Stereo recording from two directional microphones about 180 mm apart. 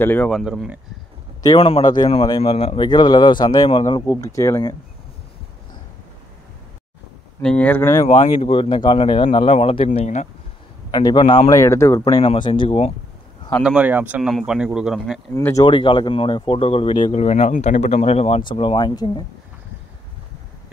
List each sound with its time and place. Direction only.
0.0 s speech: 10° left (ahead or behind)
0.3 s speech: centre (ahead or behind)
1.4 s a man's voice: 25° left (ahead or behind)
7.4 s speech: 10° left (ahead or behind)
8.1 s speech: 35° left (ahead or behind)
10.9 s a man's voice: 20° left (ahead or behind)
12.2 s speech: 30° left (ahead or behind)
13.6 s speech: 5° right (ahead or behind)
15.3 s a man's voice: 15° left (ahead or behind)